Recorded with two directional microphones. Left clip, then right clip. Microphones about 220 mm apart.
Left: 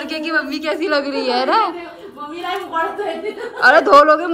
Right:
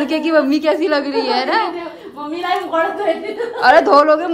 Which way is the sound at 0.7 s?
15° right (ahead or behind).